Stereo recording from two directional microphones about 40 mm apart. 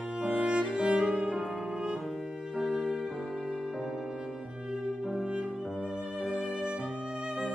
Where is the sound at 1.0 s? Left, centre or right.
Centre.